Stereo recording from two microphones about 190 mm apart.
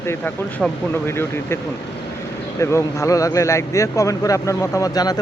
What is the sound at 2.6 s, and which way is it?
Speech, 15° left (ahead or behind).